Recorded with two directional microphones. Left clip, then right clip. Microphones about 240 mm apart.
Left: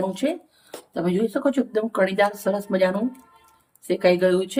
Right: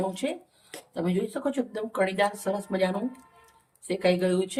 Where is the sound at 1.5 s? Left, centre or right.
Centre.